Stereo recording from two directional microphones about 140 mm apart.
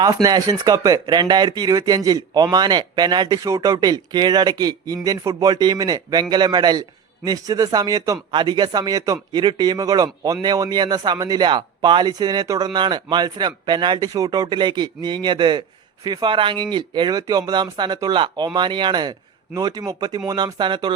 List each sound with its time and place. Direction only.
0.0 s speech: 25° right (ahead or behind)